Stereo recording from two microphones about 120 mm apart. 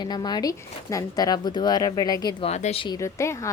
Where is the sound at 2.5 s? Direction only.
65° left (ahead or behind).